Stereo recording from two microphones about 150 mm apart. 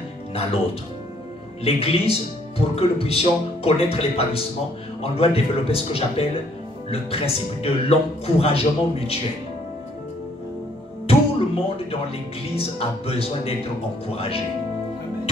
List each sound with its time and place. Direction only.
0.3 s speech: 40° left (ahead or behind)
1.6 s speech: 40° left (ahead or behind)
11.1 s speech: 40° left (ahead or behind)